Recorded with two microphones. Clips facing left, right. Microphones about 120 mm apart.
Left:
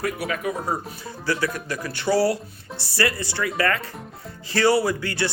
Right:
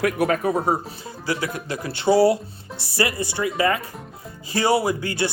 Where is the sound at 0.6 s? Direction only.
25° right (ahead or behind).